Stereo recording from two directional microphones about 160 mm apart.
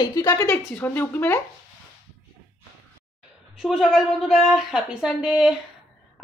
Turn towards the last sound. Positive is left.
turn(degrees=-5)  # may be behind; listen again after turning